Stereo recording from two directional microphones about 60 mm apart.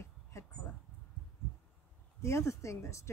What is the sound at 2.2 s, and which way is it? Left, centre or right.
Speech, left.